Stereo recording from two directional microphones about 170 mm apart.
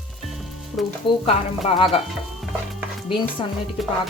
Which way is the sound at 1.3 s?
35° left (ahead or behind).